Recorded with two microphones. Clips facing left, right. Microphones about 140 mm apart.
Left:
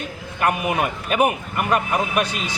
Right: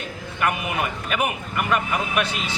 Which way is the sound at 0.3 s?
40° left (ahead or behind).